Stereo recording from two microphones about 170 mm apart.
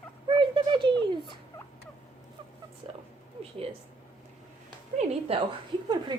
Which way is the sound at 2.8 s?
35° right (ahead or behind).